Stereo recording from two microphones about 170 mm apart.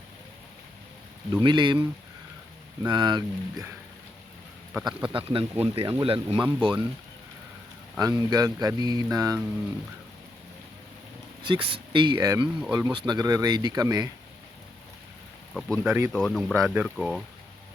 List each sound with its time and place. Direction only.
1.3 s speech: 25° right (ahead or behind)
2.8 s speech: 25° right (ahead or behind)
4.7 s speech: centre (ahead or behind)
5.1 s speech: 30° right (ahead or behind)
7.9 s speech: 20° right (ahead or behind)
11.4 s speech: 30° right (ahead or behind)
15.5 s speech: centre (ahead or behind)
15.9 s speech: 15° right (ahead or behind)
16.1 s speech: 5° left (ahead or behind)